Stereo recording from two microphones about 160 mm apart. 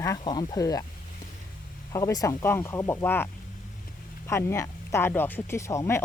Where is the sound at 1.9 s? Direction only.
20° left (ahead or behind).